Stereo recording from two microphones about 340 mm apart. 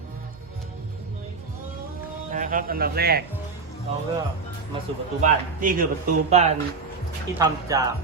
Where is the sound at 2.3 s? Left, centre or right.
Right.